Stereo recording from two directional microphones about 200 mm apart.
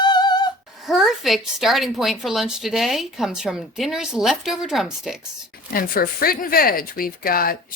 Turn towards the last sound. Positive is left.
turn(degrees=45)  # may be behind; listen again after turning